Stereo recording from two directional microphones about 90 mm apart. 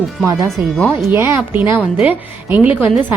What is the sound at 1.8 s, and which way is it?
A woman's voice, 15° right (ahead or behind).